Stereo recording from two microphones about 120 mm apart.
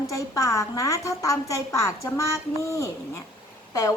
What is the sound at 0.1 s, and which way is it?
A woman's voice, 25° left (ahead or behind).